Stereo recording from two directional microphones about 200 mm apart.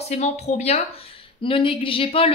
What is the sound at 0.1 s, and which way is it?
A woman's voice, 35° left (ahead or behind).